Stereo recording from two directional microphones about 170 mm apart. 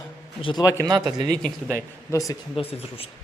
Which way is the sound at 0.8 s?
25° right (ahead or behind).